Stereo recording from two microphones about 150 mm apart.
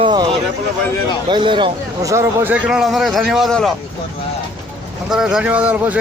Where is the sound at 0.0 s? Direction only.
30° right (ahead or behind).